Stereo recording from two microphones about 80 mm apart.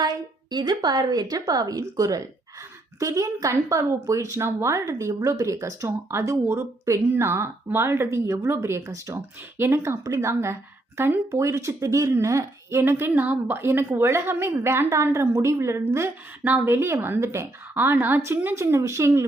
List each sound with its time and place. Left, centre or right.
0.5 s a woman's voice: right
12.8 s speech: right